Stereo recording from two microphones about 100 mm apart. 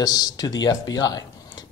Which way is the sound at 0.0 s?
40° left (ahead or behind).